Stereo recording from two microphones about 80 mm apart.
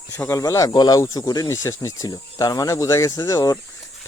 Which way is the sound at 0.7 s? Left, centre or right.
Left.